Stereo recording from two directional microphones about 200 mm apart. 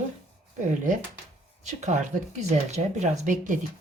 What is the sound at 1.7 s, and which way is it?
Speech, 35° right (ahead or behind).